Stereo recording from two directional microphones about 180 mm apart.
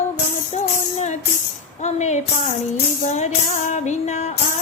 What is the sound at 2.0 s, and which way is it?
Music, 40° left (ahead or behind).